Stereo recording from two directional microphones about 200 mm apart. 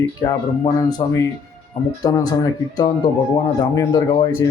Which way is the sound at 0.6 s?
20° left (ahead or behind).